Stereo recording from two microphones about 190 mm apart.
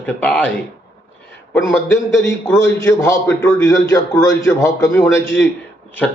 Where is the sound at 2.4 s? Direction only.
15° left (ahead or behind).